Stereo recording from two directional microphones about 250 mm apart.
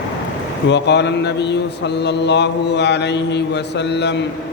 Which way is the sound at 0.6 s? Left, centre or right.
Left.